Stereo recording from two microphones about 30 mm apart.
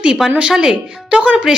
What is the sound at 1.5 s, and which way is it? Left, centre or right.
Speech, centre.